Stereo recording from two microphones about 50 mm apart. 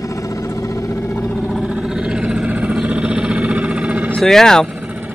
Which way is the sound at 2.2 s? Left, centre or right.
Right.